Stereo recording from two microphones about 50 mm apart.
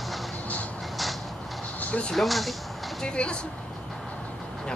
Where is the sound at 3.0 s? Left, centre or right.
Centre.